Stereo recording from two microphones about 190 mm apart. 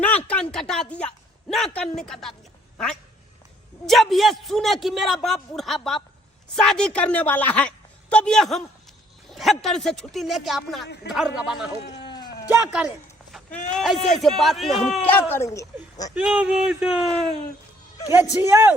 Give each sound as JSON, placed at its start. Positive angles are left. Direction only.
{"t": 0.3, "sound": "a sound", "side_deg": 5}
{"t": 3.8, "sound": "a man's voice", "side_deg": 0}
{"t": 10.8, "sound": "speech", "side_deg": 60}
{"t": 11.1, "sound": "a man's voice", "side_deg": 0}
{"t": 16.1, "sound": "a man's voice", "side_deg": -5}
{"t": 18.3, "sound": "a man's voice", "side_deg": -10}